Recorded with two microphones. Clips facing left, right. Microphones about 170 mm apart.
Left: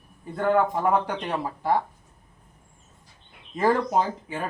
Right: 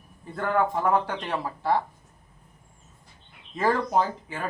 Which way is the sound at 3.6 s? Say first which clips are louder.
Left 1 dB; 15° left (ahead or behind).